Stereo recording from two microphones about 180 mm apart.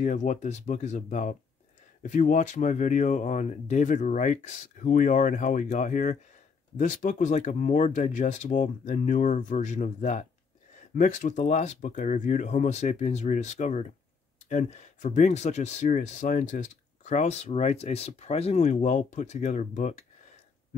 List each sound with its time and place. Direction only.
0.0 s speech: 45° left (ahead or behind)